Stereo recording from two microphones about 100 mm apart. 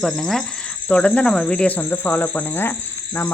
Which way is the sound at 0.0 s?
5° left (ahead or behind).